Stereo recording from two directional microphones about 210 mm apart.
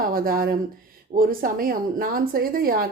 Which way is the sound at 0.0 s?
45° right (ahead or behind).